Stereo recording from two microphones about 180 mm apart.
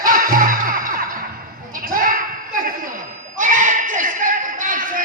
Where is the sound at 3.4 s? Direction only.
45° right (ahead or behind).